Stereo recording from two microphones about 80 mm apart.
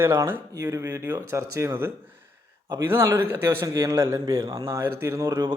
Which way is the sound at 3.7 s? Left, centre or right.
Right.